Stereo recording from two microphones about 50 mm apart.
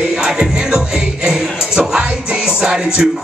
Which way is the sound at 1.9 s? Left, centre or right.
Centre.